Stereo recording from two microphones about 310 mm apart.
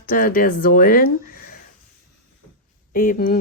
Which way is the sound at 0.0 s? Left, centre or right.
Left.